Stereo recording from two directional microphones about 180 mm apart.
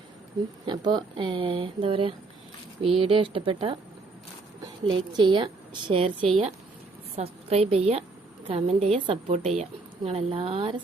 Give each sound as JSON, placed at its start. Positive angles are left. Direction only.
{"t": 0.6, "sound": "a woman's voice", "side_deg": -25}
{"t": 7.2, "sound": "a woman's voice", "side_deg": -35}